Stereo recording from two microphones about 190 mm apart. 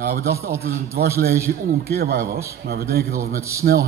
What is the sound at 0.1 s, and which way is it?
Speech, 55° right (ahead or behind).